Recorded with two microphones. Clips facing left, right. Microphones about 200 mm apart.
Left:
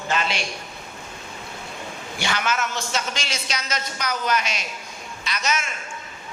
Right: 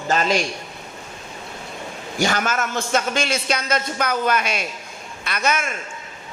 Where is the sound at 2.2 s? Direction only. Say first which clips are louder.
Right 4 dB; 45° right (ahead or behind).